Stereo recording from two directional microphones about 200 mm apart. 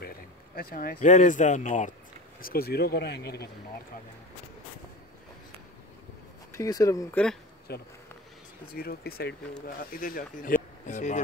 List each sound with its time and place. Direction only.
0.6 s speech: 50° left (ahead or behind)
2.4 s speech: 50° left (ahead or behind)
6.5 s speech: 15° left (ahead or behind)
7.7 s speech: 50° left (ahead or behind); by 11.1 s 35° left (ahead or behind)